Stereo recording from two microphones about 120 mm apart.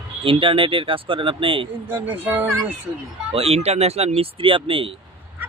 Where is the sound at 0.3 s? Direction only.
45° right (ahead or behind).